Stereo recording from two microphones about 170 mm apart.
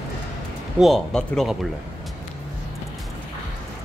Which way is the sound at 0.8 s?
5° left (ahead or behind).